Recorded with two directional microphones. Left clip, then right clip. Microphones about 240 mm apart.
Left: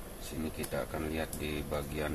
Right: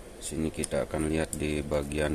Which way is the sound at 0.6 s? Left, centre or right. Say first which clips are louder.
Right 6 dB; right.